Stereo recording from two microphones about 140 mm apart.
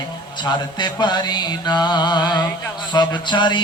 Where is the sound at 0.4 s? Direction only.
30° left (ahead or behind).